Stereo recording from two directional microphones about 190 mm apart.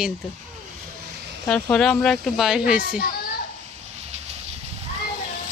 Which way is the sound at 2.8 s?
50° left (ahead or behind).